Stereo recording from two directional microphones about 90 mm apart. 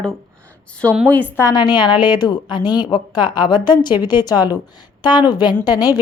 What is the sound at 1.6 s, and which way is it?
A woman's voice, 55° left (ahead or behind).